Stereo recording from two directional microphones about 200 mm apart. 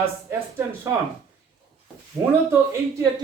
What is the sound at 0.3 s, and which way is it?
Speech, 15° right (ahead or behind).